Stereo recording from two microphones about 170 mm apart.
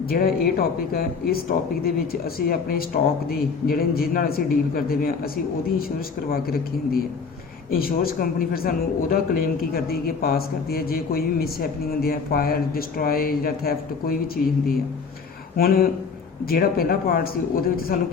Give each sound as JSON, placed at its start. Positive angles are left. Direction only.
{"t": 0.0, "sound": "a man's voice", "side_deg": 60}
{"t": 15.5, "sound": "a man's voice", "side_deg": 60}